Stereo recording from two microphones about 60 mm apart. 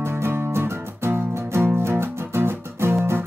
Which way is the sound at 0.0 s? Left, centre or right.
Right.